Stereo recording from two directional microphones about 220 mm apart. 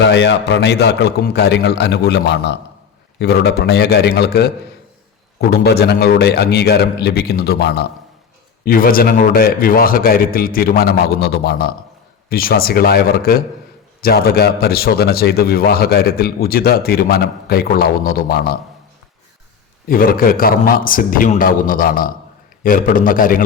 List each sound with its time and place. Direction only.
0.0 s a man's voice: 50° left (ahead or behind)
19.9 s a man's voice: 40° left (ahead or behind)